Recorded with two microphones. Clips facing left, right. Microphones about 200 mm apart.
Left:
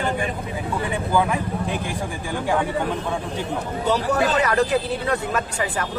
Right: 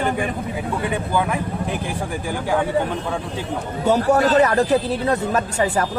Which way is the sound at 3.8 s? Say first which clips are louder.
Right 5 dB; 45° right (ahead or behind).